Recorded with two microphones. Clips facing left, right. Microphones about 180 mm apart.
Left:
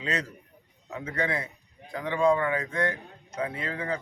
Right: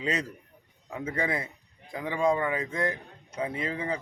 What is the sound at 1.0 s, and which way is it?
Speech, 25° right (ahead or behind).